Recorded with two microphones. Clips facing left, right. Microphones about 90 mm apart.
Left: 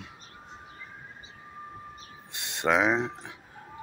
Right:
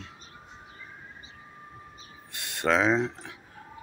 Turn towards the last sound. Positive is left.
turn(degrees=15)  # may be behind; listen again after turning